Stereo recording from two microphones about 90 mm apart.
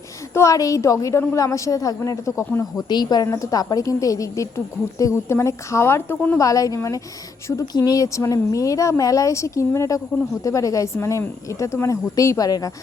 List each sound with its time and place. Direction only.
0.3 s a woman's voice: 40° left (ahead or behind)
2.9 s a woman's voice: 50° left (ahead or behind)
3.2 s a woman's voice: 40° left (ahead or behind)
6.4 s a woman's voice: 40° left (ahead or behind)